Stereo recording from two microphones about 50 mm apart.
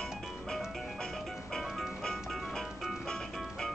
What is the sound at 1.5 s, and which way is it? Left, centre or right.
Music, centre.